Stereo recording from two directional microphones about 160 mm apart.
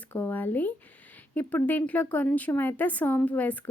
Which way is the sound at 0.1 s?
10° left (ahead or behind).